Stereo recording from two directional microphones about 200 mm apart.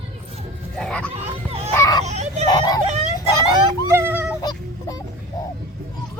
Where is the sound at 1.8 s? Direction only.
20° left (ahead or behind).